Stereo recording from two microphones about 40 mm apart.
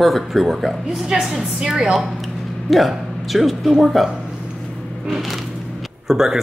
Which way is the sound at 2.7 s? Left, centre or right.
Centre.